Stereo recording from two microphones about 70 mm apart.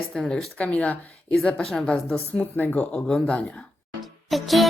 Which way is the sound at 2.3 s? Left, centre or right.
Left.